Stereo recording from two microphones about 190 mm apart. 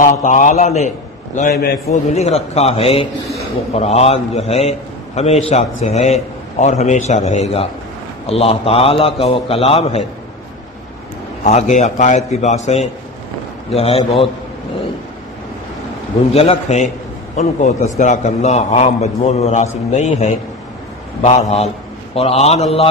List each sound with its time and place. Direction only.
0.0 s a man's voice: 40° left (ahead or behind)
1.5 s a man's voice: 55° left (ahead or behind)
1.9 s a man's voice: 35° left (ahead or behind)
11.4 s a man's voice: 40° left (ahead or behind)
16.3 s a man's voice: 30° left (ahead or behind)